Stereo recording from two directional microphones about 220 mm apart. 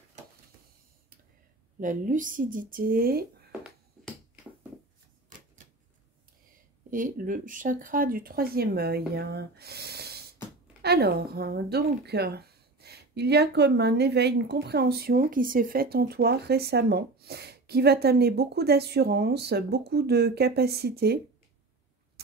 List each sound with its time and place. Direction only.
1.8 s a woman's voice: 35° right (ahead or behind)
6.9 s speech: 35° right (ahead or behind)